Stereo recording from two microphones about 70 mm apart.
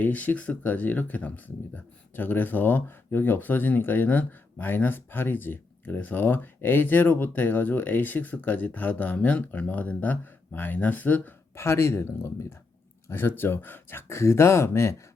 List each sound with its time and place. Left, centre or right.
0.0 s speech: left
11.5 s speech: left